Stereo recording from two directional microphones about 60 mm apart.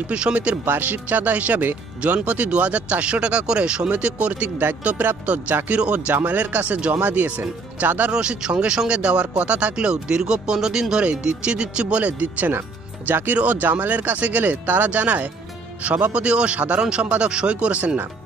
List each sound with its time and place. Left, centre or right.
0.1 s speech: right
8.1 s speech: centre